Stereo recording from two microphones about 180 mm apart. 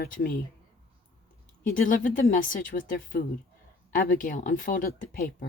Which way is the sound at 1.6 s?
50° left (ahead or behind).